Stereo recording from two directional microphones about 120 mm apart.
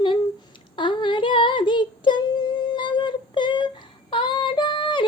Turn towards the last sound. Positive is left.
turn(degrees=45)  # may be behind; listen again after turning